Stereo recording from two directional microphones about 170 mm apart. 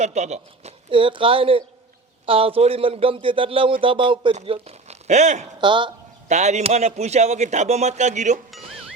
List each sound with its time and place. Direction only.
0.0 s a man's voice: 40° right (ahead or behind)
5.5 s speech: 30° right (ahead or behind)
6.2 s a man's voice: 45° right (ahead or behind)